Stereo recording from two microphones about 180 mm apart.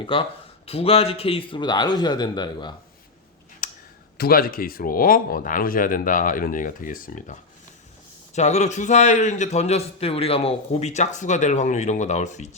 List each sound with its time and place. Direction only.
0.0 s a man's voice: 30° left (ahead or behind)
3.6 s clicking: 45° left (ahead or behind)
4.2 s a man's voice: 55° left (ahead or behind)